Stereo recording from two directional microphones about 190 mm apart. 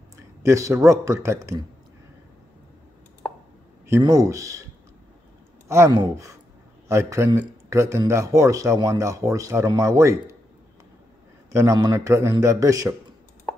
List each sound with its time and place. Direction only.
0.4 s speech: 15° right (ahead or behind)
3.8 s speech: 15° right (ahead or behind)
5.7 s speech: 15° right (ahead or behind)
11.5 s speech: 15° right (ahead or behind)